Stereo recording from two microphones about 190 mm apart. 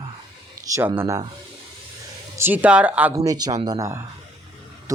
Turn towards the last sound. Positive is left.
turn(degrees=-15)  # may be behind; listen again after turning